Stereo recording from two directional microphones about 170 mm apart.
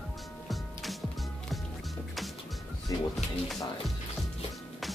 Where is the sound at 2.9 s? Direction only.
20° left (ahead or behind).